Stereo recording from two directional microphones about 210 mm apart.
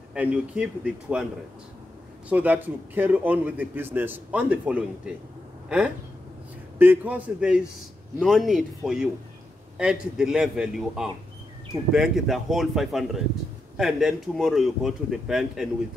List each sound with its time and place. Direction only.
0.1 s speech: 5° right (ahead or behind)
2.2 s a man's voice: 5° right (ahead or behind)
6.8 s a man's voice: 10° right (ahead or behind)